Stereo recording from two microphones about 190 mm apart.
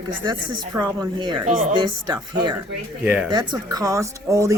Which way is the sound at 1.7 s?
20° right (ahead or behind).